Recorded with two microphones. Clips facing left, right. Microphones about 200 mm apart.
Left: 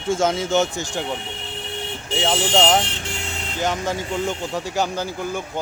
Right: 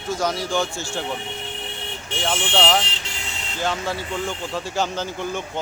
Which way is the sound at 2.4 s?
40° left (ahead or behind).